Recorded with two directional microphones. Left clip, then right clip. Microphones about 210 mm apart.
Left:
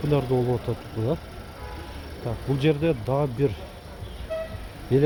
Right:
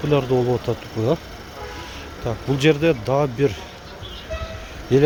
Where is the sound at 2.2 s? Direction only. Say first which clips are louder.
Right 6 dB; 20° right (ahead or behind).